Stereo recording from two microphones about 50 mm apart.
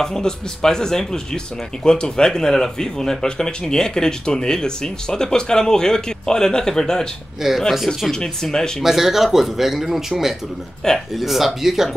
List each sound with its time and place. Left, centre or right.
0.0 s speech: centre
7.4 s speech: centre
8.1 s speech: centre
8.8 s speech: centre
10.8 s speech: centre
11.1 s speech: centre